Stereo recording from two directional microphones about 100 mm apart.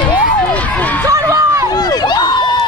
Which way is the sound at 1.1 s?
35° right (ahead or behind).